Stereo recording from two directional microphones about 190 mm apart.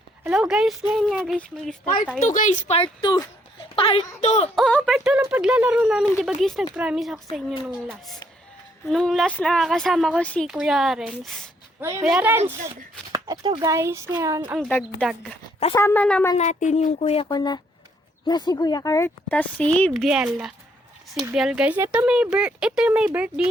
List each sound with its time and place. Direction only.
0.3 s a woman's voice: 5° right (ahead or behind)
2.3 s a woman's voice: 40° left (ahead or behind)
4.5 s a woman's voice: centre (ahead or behind)
11.8 s speech: 15° right (ahead or behind)
13.1 s speech: 20° right (ahead or behind)
15.7 s speech: 15° left (ahead or behind)
16.4 s a woman's voice: 40° left (ahead or behind); by 23.3 s 5° right (ahead or behind)